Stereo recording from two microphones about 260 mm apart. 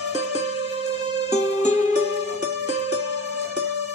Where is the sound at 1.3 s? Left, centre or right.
Left.